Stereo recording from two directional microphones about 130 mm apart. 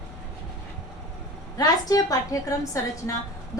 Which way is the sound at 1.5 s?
30° left (ahead or behind).